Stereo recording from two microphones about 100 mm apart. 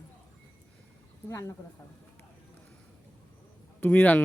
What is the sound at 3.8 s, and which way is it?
Speech, 15° left (ahead or behind).